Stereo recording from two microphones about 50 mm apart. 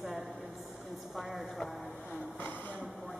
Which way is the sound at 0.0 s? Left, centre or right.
Centre.